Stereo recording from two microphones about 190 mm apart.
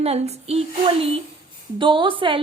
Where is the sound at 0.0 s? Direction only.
35° right (ahead or behind).